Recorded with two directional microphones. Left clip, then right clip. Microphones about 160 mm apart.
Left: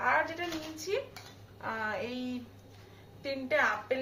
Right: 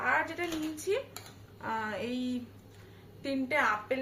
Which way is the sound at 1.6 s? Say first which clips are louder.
Even; 20° left (ahead or behind).